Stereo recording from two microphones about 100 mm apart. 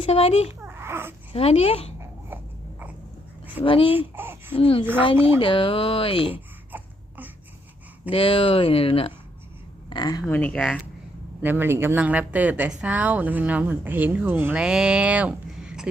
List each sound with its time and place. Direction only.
0.0 s speech: 70° left (ahead or behind)
0.6 s babbling: 25° right (ahead or behind)
1.3 s speech: 80° left
2.0 s a sound: 20° right (ahead or behind)
3.6 s speech: 65° left (ahead or behind)
3.9 s a sound: 20° right (ahead or behind)
4.5 s speech: 65° left (ahead or behind)
6.3 s a sound: 20° right (ahead or behind)
8.1 s speech: 65° left (ahead or behind)
9.9 s speech: 45° left (ahead or behind)
10.2 s speech: 15° left (ahead or behind)
11.4 s speech: 20° right (ahead or behind)
14.5 s speech: 5° right (ahead or behind)